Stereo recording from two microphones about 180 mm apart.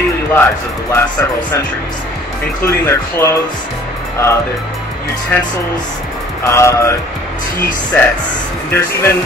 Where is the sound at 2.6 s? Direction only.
15° left (ahead or behind).